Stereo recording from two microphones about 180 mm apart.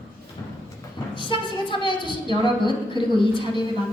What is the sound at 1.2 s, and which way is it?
A woman's voice, 25° left (ahead or behind).